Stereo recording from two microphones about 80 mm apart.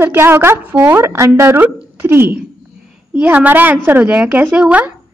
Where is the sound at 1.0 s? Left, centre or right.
Right; by 4.9 s centre.